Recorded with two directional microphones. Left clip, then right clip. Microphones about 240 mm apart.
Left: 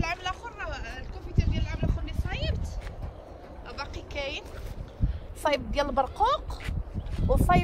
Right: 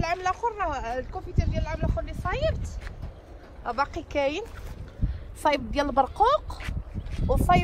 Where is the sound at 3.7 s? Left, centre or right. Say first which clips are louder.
Right 11 dB; centre.